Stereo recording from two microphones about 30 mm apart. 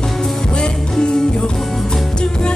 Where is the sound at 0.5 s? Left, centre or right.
Left.